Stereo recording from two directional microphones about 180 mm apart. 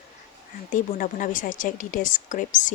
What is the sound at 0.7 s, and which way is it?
A woman's voice, 45° left (ahead or behind).